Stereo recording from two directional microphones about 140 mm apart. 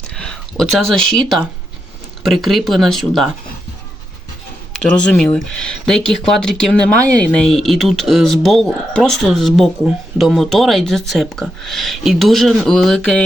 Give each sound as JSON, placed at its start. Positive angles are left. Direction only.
{"t": 0.2, "sound": "a sound", "side_deg": 5}
{"t": 2.2, "sound": "speech", "side_deg": 0}
{"t": 4.9, "sound": "speech", "side_deg": 5}